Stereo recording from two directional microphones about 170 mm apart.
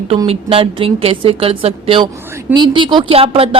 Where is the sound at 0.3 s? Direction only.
35° right (ahead or behind).